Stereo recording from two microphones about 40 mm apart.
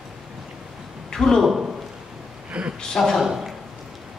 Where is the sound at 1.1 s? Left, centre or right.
Centre.